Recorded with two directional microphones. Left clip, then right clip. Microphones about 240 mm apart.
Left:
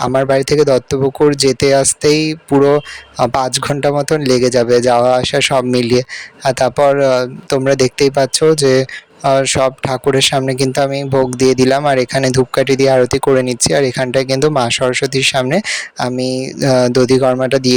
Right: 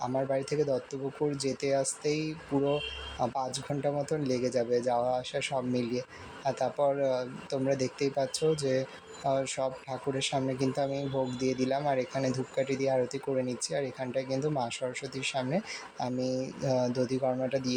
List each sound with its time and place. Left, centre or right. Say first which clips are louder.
0.0 s a man's voice: left 18 dB; left